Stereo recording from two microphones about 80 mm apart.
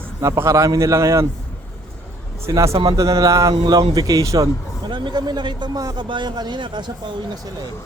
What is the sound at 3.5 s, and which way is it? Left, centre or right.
Speech, right.